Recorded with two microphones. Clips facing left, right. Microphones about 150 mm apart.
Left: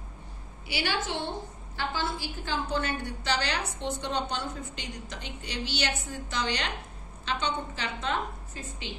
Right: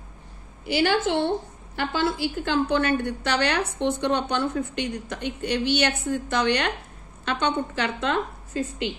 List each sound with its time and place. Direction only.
0.7 s a woman's voice: 50° right (ahead or behind)
1.8 s a woman's voice: 70° right (ahead or behind)